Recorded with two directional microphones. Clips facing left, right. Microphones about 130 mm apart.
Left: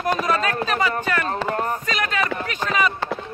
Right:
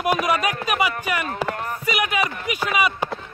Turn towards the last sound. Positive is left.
turn(degrees=-10)  # may be behind; listen again after turning